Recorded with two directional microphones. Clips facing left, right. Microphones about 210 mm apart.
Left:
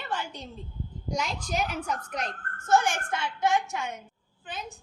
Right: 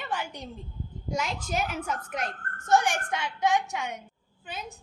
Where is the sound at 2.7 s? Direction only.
15° right (ahead or behind).